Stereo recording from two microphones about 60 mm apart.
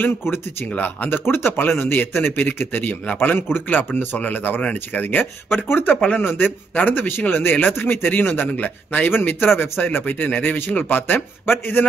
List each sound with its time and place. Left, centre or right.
0.0 s speech: left
5.2 s speech: left